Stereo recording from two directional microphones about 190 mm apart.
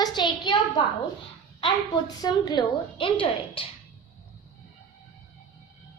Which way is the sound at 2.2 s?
20° left (ahead or behind).